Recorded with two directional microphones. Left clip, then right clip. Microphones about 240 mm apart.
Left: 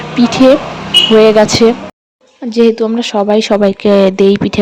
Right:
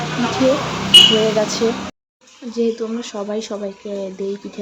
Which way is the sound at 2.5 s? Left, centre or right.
Left.